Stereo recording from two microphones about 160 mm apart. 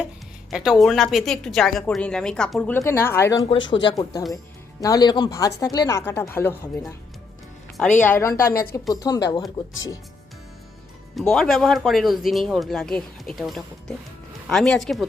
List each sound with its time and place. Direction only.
0.5 s a woman's voice: 5° right (ahead or behind); by 3.4 s 15° left (ahead or behind)
3.4 s speech: 30° left (ahead or behind); by 6.6 s 15° left (ahead or behind)
8.0 s speech: 15° left (ahead or behind)
11.1 s a woman's voice: centre (ahead or behind)